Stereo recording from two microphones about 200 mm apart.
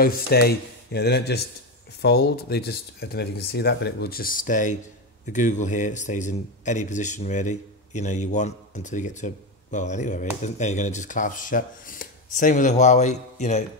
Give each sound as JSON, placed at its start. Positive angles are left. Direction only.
{"t": 0.0, "sound": "speech", "side_deg": 50}